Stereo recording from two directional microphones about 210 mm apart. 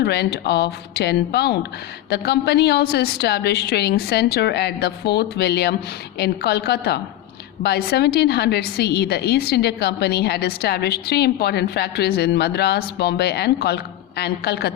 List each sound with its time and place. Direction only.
0.0 s a woman's voice: 50° left (ahead or behind)